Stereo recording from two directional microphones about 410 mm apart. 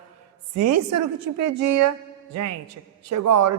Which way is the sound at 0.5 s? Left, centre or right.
Right.